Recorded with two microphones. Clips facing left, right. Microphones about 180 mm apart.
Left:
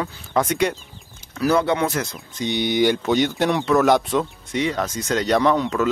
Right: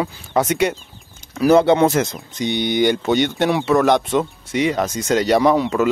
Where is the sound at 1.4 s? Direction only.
25° right (ahead or behind).